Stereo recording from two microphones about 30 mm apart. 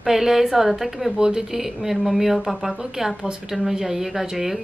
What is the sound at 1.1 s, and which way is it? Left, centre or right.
Speech, right.